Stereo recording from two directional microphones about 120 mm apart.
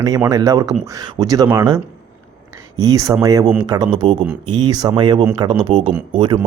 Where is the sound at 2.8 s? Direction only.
30° right (ahead or behind).